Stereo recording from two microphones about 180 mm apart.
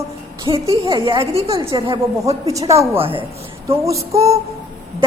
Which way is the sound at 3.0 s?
30° right (ahead or behind).